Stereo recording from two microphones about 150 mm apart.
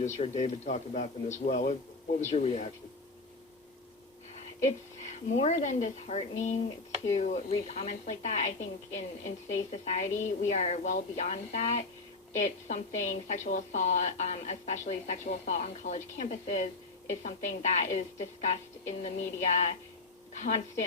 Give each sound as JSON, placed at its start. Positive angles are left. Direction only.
{"t": 0.2, "sound": "a woman's voice", "side_deg": 50}
{"t": 2.3, "sound": "a woman's voice", "side_deg": 45}
{"t": 5.3, "sound": "a woman's voice", "side_deg": 50}